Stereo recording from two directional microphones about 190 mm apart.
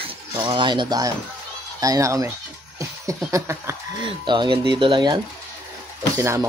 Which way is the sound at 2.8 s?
15° right (ahead or behind).